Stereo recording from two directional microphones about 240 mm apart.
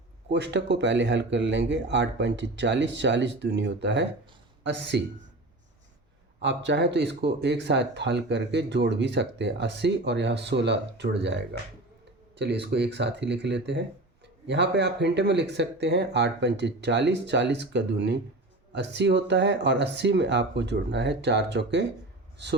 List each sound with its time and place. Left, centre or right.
0.3 s speech: right
6.4 s speech: right
12.4 s speech: right